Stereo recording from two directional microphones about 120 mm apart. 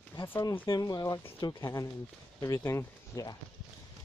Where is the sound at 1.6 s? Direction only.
30° left (ahead or behind).